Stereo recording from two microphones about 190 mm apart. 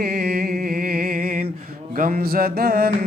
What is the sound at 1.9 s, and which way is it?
Mantra, 45° right (ahead or behind).